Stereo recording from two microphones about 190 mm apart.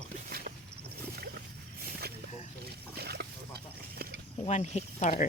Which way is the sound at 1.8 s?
55° right (ahead or behind).